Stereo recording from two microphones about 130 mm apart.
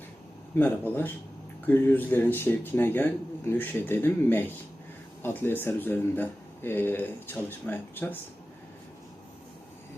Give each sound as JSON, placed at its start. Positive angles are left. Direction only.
{"t": 0.6, "sound": "speech", "side_deg": 15}